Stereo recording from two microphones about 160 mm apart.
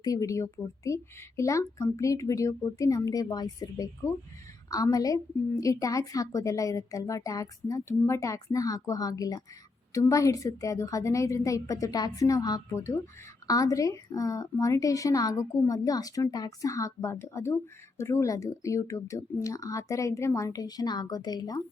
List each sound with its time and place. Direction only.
0.0 s a woman's voice: 20° left (ahead or behind)